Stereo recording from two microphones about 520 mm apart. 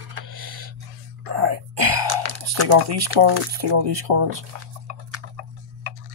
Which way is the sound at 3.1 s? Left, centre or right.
Right.